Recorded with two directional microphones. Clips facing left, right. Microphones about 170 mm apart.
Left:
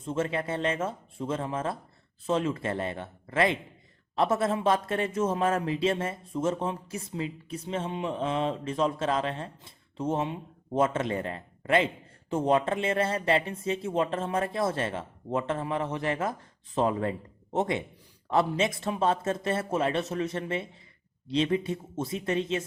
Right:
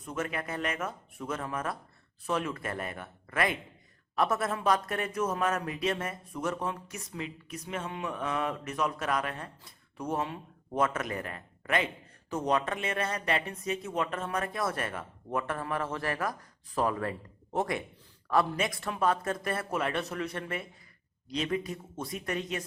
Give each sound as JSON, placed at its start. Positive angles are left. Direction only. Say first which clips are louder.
{"t": 0.0, "sound": "speech", "louder": "left 5 dB", "side_deg": 25}